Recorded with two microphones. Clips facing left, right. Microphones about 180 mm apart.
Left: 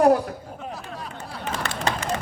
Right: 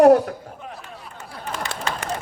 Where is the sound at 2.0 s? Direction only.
60° right (ahead or behind).